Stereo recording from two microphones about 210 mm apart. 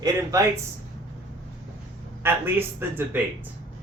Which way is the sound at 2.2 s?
10° right (ahead or behind).